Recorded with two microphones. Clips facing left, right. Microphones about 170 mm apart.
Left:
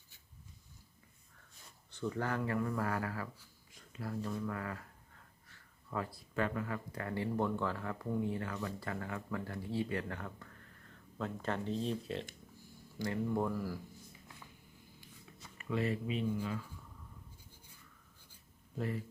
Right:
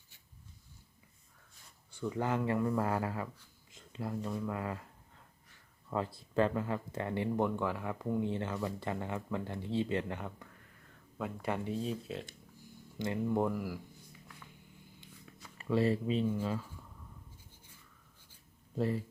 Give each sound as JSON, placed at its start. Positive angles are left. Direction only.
{"t": 1.9, "sound": "speech", "side_deg": -10}
{"t": 13.0, "sound": "speech", "side_deg": -20}
{"t": 15.5, "sound": "speech", "side_deg": -30}
{"t": 18.8, "sound": "speech", "side_deg": -30}